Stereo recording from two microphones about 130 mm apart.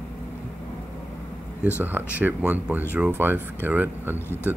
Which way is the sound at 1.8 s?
15° right (ahead or behind).